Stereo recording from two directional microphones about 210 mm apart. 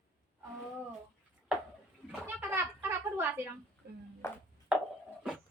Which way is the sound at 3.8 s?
50° right (ahead or behind).